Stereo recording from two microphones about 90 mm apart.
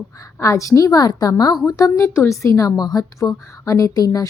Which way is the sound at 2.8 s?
50° left (ahead or behind).